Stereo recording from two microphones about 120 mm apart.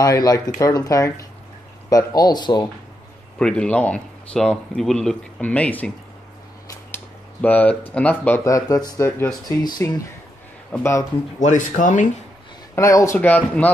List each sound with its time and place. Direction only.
0.0 s speech: 30° left (ahead or behind)
3.3 s speech: 10° left (ahead or behind)
7.4 s speech: 10° left (ahead or behind)
8.5 s speech: 30° left (ahead or behind)
11.3 s speech: 90° left
12.7 s speech: 25° left (ahead or behind)